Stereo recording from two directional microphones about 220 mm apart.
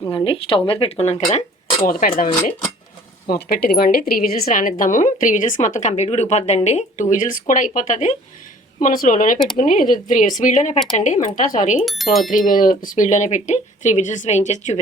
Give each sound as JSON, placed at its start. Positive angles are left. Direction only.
{"t": 0.3, "sound": "speech", "side_deg": 25}
{"t": 1.9, "sound": "a woman's voice", "side_deg": 40}
{"t": 11.9, "sound": "speech", "side_deg": 0}
{"t": 12.3, "sound": "a woman's voice", "side_deg": 35}